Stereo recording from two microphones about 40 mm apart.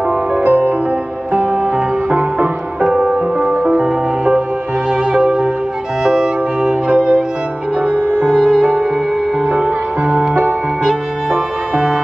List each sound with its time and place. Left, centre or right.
0.5 s music: right
1.3 s music: right
2.1 s music: right
2.8 s music: right
3.3 s music: right
3.8 s music: centre
7.8 s music: right
8.3 s music: centre
8.5 s music: right
9.5 s music: right
10.8 s music: right